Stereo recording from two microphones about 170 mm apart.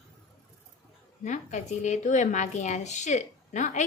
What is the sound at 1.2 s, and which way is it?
A woman's voice, 45° left (ahead or behind).